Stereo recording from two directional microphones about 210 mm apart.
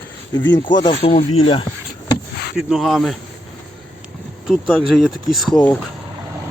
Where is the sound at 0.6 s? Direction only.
20° left (ahead or behind).